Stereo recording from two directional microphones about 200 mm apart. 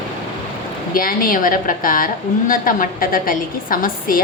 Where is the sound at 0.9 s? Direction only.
45° left (ahead or behind).